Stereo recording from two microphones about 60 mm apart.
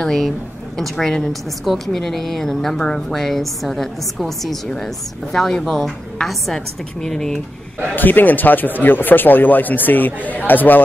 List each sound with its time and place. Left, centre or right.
0.0 s a woman's voice: centre
7.9 s speech: left